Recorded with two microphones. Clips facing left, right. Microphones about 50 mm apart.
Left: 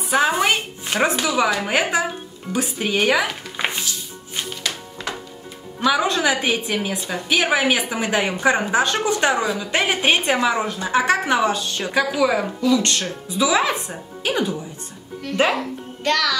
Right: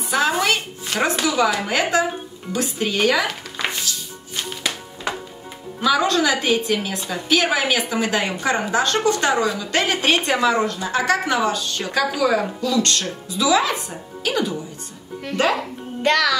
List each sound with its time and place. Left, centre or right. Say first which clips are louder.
0.1 s a woman's voice: left 1 dB; left
5.9 s a woman's voice: right 1 dB; centre
16.0 s music: right 3 dB; centre